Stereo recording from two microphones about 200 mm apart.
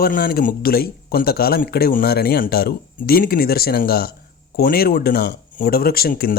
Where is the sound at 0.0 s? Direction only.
45° left (ahead or behind).